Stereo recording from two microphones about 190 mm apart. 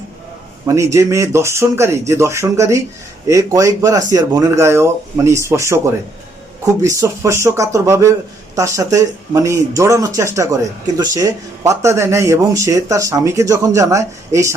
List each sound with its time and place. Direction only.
0.6 s speech: 15° right (ahead or behind)